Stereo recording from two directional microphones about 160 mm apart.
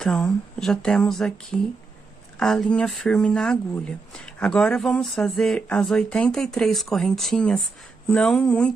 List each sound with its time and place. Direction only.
0.0 s speech: 5° left (ahead or behind)